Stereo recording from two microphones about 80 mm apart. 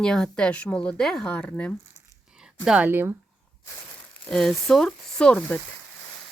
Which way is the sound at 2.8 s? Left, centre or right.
Right.